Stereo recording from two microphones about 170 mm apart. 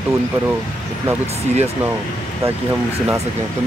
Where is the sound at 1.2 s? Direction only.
40° right (ahead or behind).